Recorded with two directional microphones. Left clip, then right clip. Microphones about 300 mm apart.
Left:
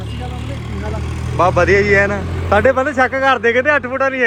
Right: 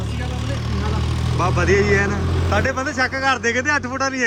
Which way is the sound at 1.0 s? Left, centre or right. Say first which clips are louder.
Right 1 dB; right.